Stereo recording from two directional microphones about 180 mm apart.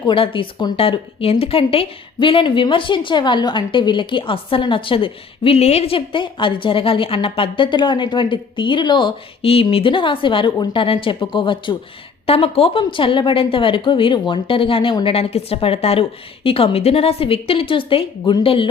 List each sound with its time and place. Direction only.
0.0 s a woman's voice: 30° left (ahead or behind)